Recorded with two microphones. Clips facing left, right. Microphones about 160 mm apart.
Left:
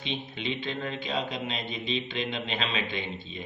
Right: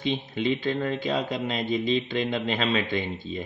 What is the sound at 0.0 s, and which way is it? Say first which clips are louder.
Speech: right 7 dB; 40° right (ahead or behind).